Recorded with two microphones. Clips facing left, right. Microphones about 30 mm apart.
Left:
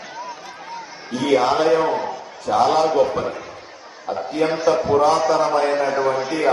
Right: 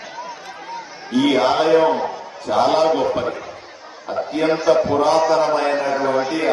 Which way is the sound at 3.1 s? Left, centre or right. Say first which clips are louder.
Right 2 dB; centre.